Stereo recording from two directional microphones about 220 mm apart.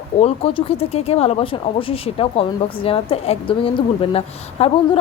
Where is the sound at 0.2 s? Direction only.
25° left (ahead or behind).